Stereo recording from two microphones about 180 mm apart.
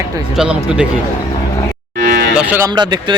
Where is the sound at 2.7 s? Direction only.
25° right (ahead or behind).